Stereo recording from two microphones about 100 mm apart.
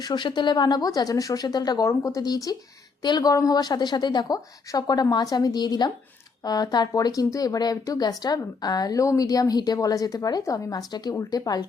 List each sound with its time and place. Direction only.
0.0 s a woman's voice: 50° left (ahead or behind)